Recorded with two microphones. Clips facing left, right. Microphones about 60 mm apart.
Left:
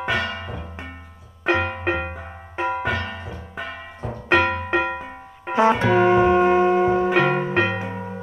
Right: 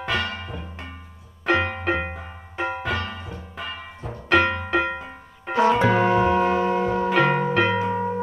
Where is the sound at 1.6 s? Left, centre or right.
Left.